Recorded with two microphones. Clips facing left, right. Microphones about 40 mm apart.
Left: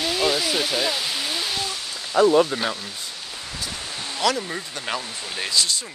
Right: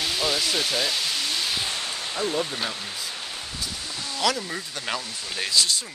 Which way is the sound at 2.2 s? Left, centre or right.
Left.